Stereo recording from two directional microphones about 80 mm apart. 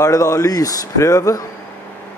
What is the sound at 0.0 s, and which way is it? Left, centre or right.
Speech, left.